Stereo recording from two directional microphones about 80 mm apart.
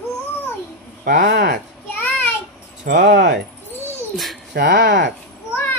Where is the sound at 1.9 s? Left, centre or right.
Left.